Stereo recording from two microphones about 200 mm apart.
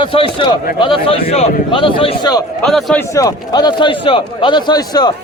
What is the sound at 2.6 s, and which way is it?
A man's voice, 5° left (ahead or behind).